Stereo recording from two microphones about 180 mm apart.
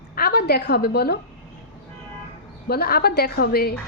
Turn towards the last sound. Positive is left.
turn(degrees=60)  # may be behind; listen again after turning